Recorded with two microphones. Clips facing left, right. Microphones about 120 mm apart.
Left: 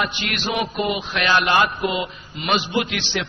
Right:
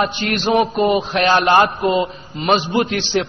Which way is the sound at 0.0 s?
35° right (ahead or behind).